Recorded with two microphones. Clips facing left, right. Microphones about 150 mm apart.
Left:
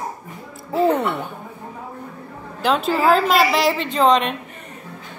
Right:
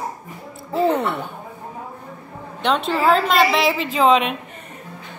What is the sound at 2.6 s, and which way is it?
A woman's voice, 5° left (ahead or behind).